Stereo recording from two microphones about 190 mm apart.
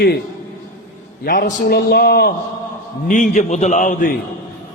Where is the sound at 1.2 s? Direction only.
50° left (ahead or behind).